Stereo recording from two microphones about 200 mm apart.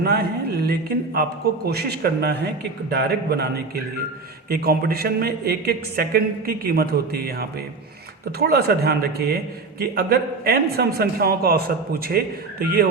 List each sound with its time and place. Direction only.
0.0 s a man's voice: 50° right (ahead or behind)